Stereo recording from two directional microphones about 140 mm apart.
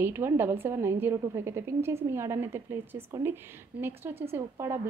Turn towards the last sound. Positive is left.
turn(degrees=-20)  # may be behind; listen again after turning